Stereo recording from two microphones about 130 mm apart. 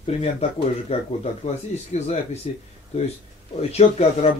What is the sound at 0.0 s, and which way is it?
Speech, 50° left (ahead or behind).